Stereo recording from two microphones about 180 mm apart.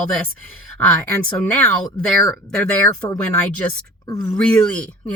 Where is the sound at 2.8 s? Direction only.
20° left (ahead or behind).